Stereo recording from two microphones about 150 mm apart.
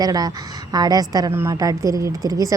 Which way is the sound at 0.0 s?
25° right (ahead or behind).